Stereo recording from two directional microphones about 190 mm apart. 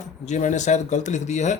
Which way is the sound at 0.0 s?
40° left (ahead or behind).